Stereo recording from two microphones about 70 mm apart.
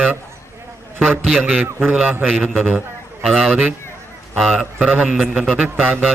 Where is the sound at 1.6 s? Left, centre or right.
Right.